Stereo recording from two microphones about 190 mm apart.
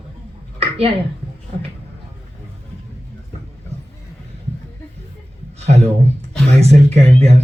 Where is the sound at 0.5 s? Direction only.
30° right (ahead or behind).